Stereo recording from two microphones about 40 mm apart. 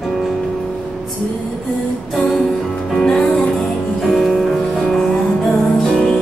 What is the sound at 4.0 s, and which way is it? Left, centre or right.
Music, centre.